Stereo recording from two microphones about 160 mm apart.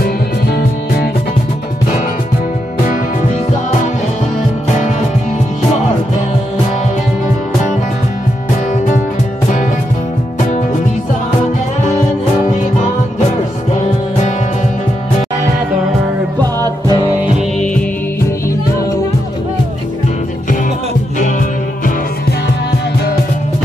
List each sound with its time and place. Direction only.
0.0 s music: 75° left (ahead or behind)
16.5 s music: 25° right (ahead or behind)
21.2 s music: 55° left (ahead or behind)